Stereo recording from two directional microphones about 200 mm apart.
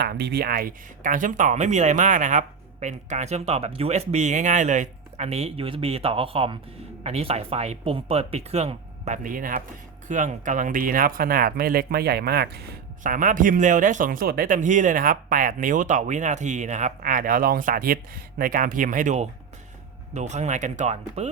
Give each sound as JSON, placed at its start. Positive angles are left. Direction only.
{"t": 0.0, "sound": "speech", "side_deg": -55}